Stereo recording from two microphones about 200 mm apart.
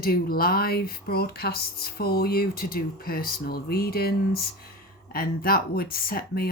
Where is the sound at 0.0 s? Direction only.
45° left (ahead or behind).